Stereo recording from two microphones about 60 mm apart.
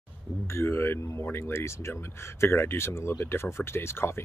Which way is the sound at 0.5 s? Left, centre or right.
Left.